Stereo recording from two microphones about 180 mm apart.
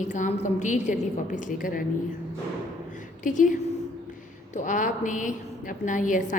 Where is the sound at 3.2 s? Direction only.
45° left (ahead or behind).